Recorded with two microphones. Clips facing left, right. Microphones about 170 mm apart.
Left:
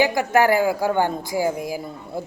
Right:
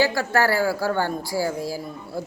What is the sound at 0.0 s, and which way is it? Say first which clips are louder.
Speech: left 3 dB; 20° left (ahead or behind).